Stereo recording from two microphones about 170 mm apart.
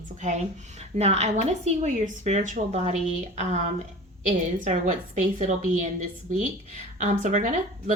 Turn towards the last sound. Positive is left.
turn(degrees=-45)  # may be behind; listen again after turning